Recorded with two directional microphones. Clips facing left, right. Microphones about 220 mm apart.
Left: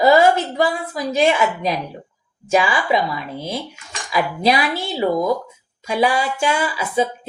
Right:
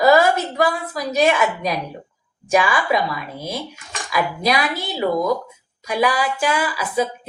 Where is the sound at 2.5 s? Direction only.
25° left (ahead or behind).